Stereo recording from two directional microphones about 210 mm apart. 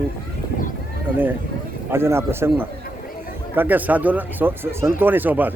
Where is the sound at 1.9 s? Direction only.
10° right (ahead or behind).